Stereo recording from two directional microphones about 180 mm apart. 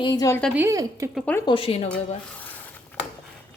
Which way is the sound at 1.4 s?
30° left (ahead or behind).